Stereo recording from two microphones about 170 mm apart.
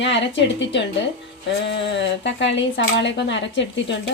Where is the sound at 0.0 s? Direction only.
90° left.